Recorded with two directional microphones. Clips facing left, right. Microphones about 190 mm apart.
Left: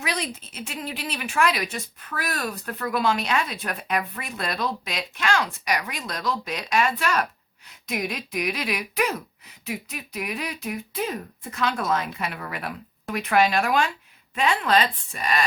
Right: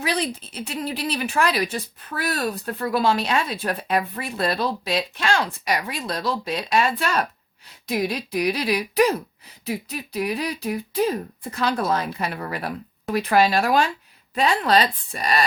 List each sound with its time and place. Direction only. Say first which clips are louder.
0.0 s a woman's voice: right 5 dB; 35° right (ahead or behind)